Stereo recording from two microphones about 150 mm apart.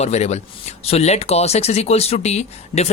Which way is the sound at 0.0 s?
45° left (ahead or behind).